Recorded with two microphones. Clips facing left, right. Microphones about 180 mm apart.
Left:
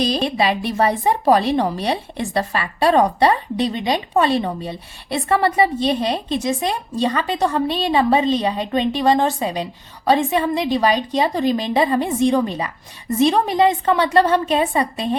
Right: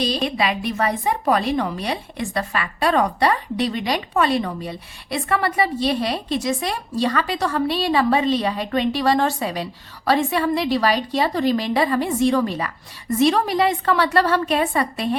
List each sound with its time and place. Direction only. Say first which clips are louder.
0.3 s a woman's voice: left 3 dB; 30° left (ahead or behind)